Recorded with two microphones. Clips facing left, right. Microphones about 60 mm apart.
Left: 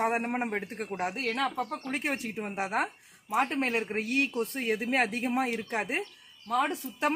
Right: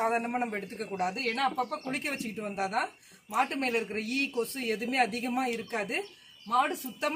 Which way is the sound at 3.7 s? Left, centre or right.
Left.